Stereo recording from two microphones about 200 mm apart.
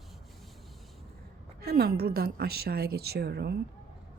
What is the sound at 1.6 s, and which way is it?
Speech, 55° right (ahead or behind).